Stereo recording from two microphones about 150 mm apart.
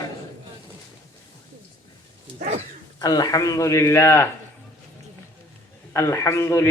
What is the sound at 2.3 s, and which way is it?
Dog, 65° right (ahead or behind).